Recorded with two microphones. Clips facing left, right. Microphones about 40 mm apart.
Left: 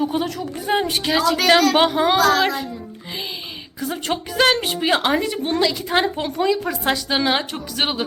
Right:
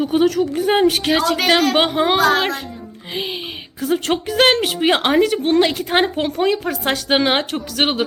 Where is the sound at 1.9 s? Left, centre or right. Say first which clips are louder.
Right 1 dB; right.